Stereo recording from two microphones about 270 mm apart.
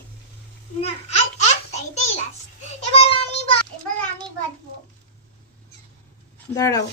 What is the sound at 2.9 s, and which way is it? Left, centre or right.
Child singing, left.